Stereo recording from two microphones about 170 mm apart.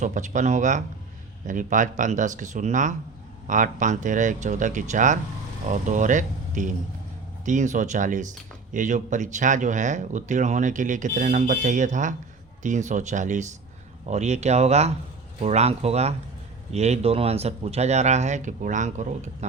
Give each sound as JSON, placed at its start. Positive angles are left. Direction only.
{"t": 0.0, "sound": "speech", "side_deg": -45}